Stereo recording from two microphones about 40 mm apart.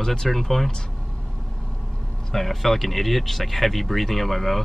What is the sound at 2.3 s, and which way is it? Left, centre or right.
Speech, centre.